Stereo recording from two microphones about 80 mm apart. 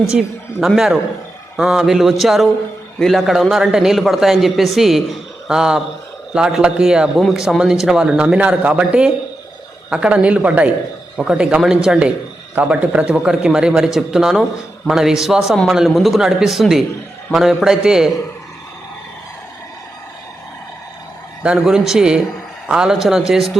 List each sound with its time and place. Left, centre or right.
0.0 s a man's voice: centre
21.4 s speech: centre